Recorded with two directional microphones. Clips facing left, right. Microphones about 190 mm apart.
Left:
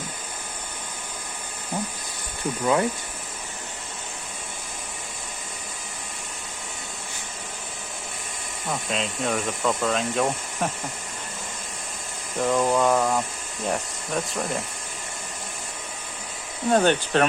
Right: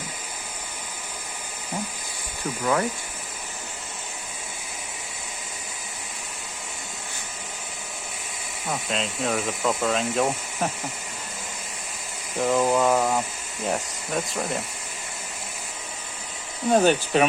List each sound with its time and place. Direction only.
8.6 s speech: centre (ahead or behind)
12.4 s speech: 5° right (ahead or behind)
16.6 s speech: 5° right (ahead or behind)